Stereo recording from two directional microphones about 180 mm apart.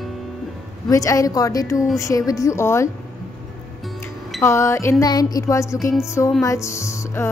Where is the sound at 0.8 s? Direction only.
20° left (ahead or behind).